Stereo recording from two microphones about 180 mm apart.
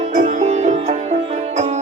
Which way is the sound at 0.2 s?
40° right (ahead or behind).